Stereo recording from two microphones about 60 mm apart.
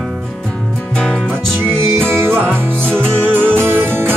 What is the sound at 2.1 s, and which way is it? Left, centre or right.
Music, right.